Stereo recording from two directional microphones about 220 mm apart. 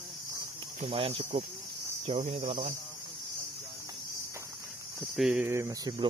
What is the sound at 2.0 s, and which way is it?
Cricket, 30° right (ahead or behind).